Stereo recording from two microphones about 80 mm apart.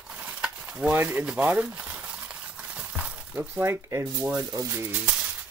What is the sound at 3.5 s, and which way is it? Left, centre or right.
Speech, right.